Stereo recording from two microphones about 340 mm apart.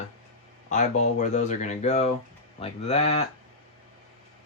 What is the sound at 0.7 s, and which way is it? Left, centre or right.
Speech, left.